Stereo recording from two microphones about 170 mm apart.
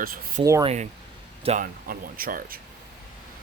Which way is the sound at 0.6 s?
40° right (ahead or behind).